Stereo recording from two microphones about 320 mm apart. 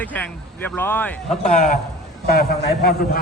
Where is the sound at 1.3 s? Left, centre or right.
Left.